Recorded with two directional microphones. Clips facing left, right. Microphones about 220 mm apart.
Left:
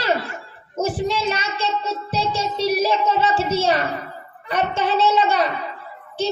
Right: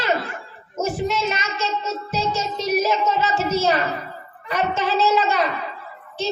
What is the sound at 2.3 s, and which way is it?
A child's voice, 30° left (ahead or behind).